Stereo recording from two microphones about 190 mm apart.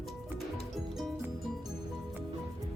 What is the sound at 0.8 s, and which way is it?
Music, centre (ahead or behind).